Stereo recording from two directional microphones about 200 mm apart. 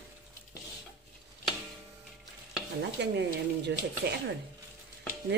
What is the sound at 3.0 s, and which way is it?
Speech, 60° right (ahead or behind).